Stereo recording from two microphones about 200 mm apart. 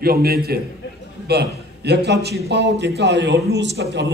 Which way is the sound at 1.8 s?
55° right (ahead or behind).